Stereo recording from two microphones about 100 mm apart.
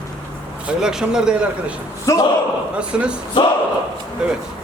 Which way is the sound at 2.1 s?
30° left (ahead or behind).